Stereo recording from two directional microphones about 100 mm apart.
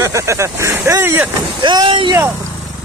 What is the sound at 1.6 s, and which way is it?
Speech, 55° right (ahead or behind).